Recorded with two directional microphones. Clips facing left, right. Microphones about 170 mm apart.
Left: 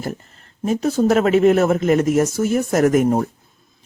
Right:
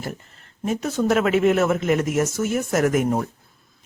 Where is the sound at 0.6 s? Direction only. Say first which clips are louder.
Left 5 dB; 35° left (ahead or behind).